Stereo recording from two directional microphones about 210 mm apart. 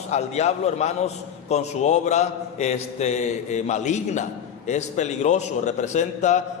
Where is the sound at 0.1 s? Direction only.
30° left (ahead or behind).